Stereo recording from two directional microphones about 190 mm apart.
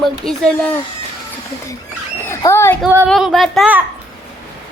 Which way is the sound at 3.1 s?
Centre (ahead or behind).